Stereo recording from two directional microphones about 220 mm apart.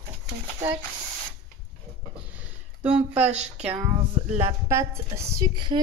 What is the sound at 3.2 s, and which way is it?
Speech, 30° right (ahead or behind).